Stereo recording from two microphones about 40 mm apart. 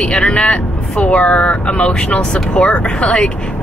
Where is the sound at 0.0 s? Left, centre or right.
Left.